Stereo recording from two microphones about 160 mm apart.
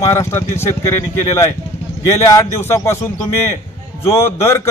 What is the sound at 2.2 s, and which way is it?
Speech, 15° left (ahead or behind).